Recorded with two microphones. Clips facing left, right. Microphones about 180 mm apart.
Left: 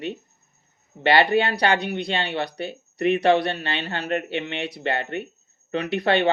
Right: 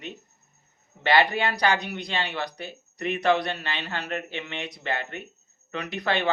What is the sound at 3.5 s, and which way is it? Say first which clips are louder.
Speech: left 4 dB; 30° left (ahead or behind).